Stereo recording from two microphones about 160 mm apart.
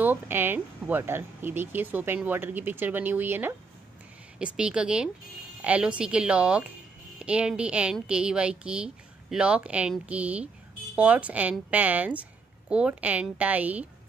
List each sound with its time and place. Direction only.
0.0 s speech: 10° right (ahead or behind)
4.6 s speech: 5° right (ahead or behind)